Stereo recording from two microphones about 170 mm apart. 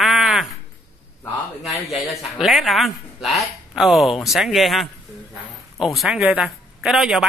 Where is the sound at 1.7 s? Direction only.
Centre (ahead or behind).